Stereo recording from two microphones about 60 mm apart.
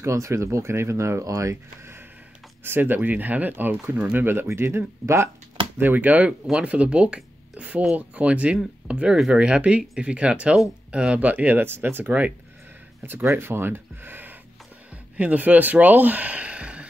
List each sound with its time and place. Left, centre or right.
0.0 s speech: right
2.6 s speech: right
5.8 s speech: right
13.0 s speech: right
15.1 s speech: right